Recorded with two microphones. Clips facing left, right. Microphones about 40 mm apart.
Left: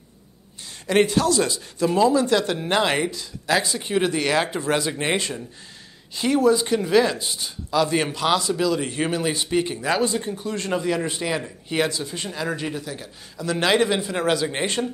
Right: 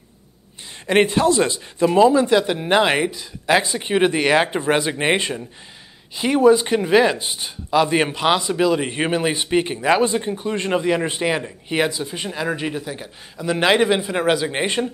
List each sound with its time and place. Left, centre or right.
0.8 s a man's voice: right